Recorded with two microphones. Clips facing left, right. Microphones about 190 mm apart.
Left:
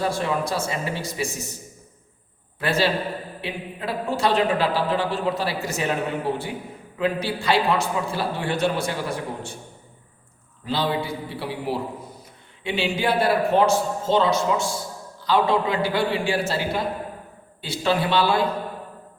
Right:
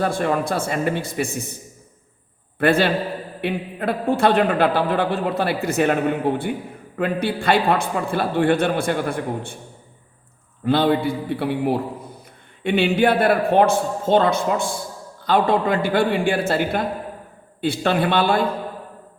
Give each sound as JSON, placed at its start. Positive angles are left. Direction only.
{"t": 0.0, "sound": "a man's voice", "side_deg": -55}
{"t": 2.6, "sound": "a man's voice", "side_deg": -55}
{"t": 10.7, "sound": "a man's voice", "side_deg": -55}